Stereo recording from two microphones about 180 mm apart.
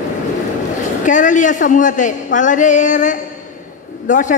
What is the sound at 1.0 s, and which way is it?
Speech, 45° left (ahead or behind).